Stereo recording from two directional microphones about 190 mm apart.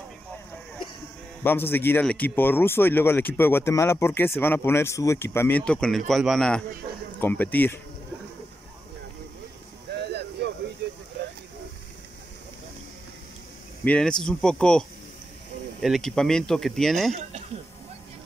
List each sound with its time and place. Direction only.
1.4 s speech: 10° left (ahead or behind)
10.4 s a sound: 65° right (ahead or behind)
13.8 s speech: 5° left (ahead or behind)